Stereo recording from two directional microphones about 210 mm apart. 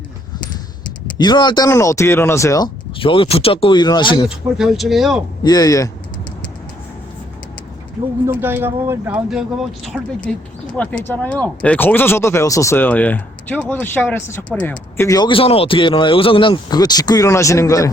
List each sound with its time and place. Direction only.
1.2 s speech: 20° left (ahead or behind)
4.5 s speech: centre (ahead or behind)
5.4 s speech: 20° left (ahead or behind)
8.3 s speech: 10° right (ahead or behind); by 17.9 s 15° left (ahead or behind)